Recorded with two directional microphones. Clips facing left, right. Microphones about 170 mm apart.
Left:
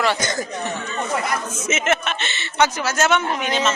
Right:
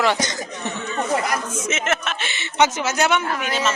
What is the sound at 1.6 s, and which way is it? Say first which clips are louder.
A woman's voice: left 2 dB; centre (ahead or behind).